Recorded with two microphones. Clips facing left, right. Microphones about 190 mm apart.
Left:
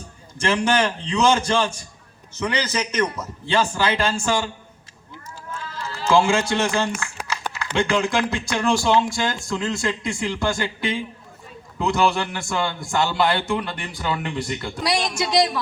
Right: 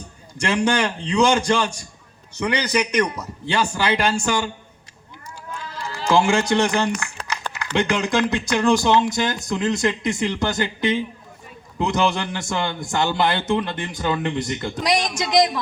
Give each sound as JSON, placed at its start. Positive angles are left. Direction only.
{"t": 1.0, "sound": "a man's voice", "side_deg": -15}
{"t": 5.5, "sound": "run", "side_deg": -15}
{"t": 7.5, "sound": "a man's voice", "side_deg": -15}